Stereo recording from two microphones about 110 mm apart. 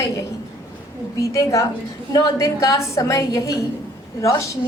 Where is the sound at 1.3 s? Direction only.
30° left (ahead or behind).